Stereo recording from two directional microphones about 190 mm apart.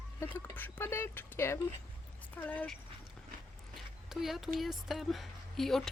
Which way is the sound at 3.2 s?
5° left (ahead or behind).